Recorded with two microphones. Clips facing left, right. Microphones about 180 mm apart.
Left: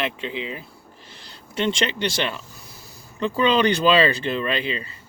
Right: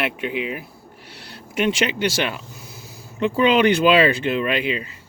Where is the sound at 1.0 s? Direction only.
70° right (ahead or behind).